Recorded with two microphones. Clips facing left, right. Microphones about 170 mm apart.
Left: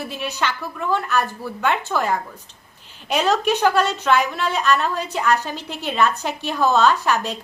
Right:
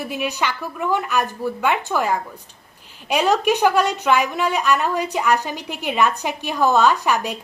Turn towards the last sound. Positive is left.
turn(degrees=-15)  # may be behind; listen again after turning